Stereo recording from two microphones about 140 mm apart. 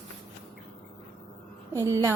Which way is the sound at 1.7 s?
20° right (ahead or behind).